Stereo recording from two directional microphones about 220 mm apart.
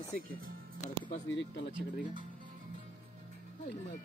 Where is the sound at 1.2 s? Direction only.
55° left (ahead or behind).